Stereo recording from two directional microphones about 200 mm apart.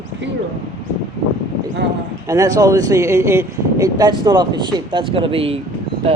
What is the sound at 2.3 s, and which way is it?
A man's voice, 20° right (ahead or behind).